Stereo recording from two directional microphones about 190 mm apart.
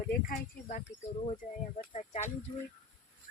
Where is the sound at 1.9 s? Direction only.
40° left (ahead or behind).